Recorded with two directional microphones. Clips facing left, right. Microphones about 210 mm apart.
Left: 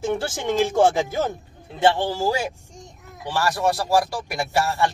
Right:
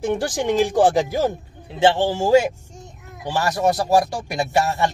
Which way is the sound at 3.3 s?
25° right (ahead or behind).